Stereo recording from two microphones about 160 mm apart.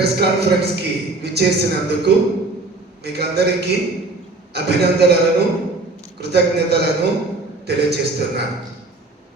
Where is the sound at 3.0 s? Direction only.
90° right.